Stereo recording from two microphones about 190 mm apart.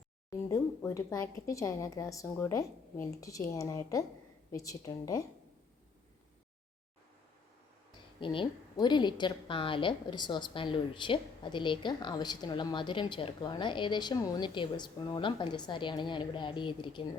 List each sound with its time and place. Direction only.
0.3 s speech: 15° left (ahead or behind)
8.2 s a woman's voice: 25° left (ahead or behind)